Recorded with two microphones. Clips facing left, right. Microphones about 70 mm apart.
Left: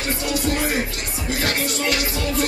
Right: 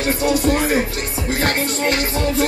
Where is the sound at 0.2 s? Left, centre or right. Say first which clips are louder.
Right 5 dB; right.